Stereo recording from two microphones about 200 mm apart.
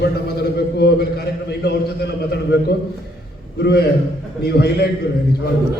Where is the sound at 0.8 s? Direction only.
55° left (ahead or behind).